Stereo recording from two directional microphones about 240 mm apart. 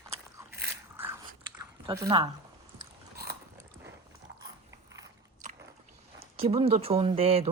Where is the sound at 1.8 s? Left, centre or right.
Centre.